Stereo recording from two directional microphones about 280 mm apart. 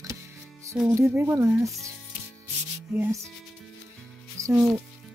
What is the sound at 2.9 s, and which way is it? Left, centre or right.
Speech, centre.